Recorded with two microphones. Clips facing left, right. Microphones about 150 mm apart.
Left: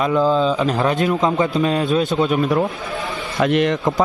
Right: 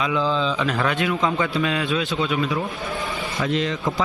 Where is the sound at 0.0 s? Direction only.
45° left (ahead or behind); by 3.8 s 65° left (ahead or behind).